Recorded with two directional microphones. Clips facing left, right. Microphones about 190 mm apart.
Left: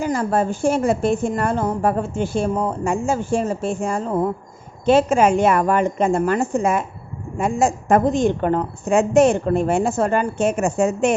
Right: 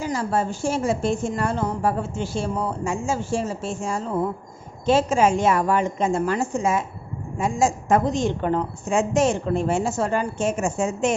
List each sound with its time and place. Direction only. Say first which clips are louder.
0.0 s a woman's voice: left 4 dB; 55° left (ahead or behind)